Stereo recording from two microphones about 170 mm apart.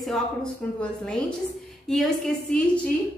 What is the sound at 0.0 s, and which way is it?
A woman's voice, 5° left (ahead or behind).